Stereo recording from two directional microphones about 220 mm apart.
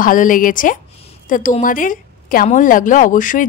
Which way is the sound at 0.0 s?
40° left (ahead or behind).